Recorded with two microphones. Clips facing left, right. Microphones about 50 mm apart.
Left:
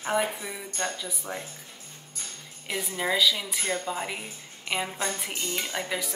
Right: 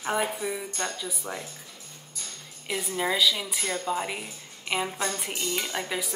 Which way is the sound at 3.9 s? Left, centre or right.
Centre.